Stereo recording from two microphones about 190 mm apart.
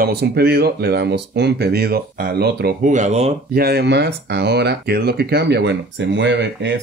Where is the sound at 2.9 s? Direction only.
35° right (ahead or behind).